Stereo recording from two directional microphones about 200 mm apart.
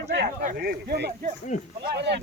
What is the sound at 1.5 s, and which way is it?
Speech, 40° left (ahead or behind).